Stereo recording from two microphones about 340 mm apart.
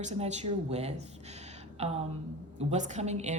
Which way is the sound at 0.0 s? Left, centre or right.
Centre.